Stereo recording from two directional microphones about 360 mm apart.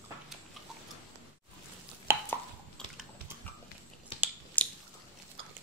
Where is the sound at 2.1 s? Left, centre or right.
Centre.